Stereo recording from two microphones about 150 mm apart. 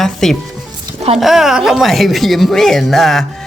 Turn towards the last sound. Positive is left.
turn(degrees=0)  # may be behind; listen again after turning